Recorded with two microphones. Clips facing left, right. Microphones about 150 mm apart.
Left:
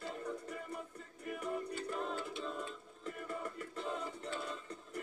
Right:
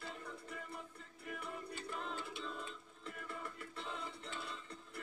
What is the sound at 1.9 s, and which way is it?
Music, 45° left (ahead or behind).